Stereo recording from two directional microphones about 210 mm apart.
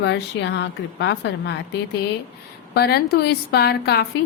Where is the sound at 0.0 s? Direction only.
55° left (ahead or behind).